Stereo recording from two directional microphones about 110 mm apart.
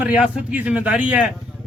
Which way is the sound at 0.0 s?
10° right (ahead or behind).